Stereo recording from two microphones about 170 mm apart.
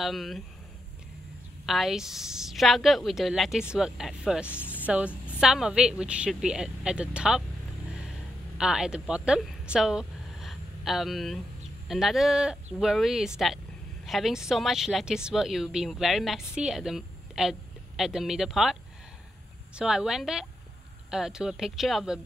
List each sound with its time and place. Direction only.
0.0 s a woman's voice: centre (ahead or behind)
1.7 s a woman's voice: centre (ahead or behind)
4.5 s music: 10° left (ahead or behind)
4.8 s a woman's voice: 5° right (ahead or behind)
8.5 s a woman's voice: 5° right (ahead or behind)